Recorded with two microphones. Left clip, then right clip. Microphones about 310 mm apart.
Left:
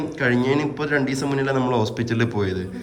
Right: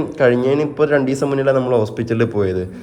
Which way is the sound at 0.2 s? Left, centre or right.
Centre.